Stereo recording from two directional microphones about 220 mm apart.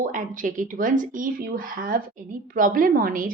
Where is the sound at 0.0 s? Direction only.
35° right (ahead or behind).